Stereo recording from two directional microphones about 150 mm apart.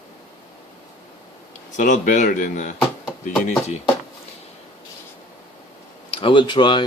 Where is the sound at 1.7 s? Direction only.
60° left (ahead or behind).